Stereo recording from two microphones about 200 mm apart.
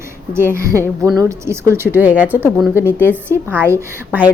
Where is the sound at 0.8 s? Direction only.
5° left (ahead or behind).